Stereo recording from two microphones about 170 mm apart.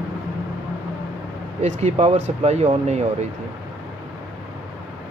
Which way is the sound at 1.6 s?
40° right (ahead or behind).